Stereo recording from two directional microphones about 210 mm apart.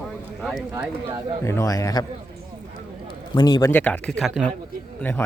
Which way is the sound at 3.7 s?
5° left (ahead or behind).